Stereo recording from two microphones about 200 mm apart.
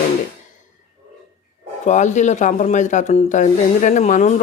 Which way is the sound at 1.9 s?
35° left (ahead or behind).